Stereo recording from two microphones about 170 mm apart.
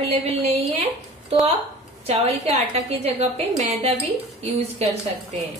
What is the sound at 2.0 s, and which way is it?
A woman's voice, 35° right (ahead or behind).